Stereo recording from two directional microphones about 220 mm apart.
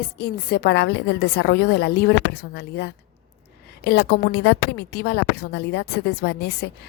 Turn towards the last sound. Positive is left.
turn(degrees=50)  # may be behind; listen again after turning